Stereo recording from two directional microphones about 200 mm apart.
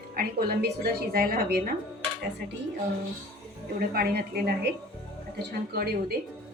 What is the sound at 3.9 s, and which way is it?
Speech, 50° right (ahead or behind).